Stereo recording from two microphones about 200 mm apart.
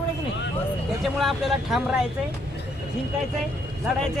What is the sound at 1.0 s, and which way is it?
Speech, centre (ahead or behind).